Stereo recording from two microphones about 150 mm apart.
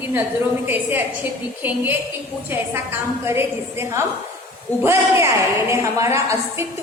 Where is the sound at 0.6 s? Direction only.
10° right (ahead or behind).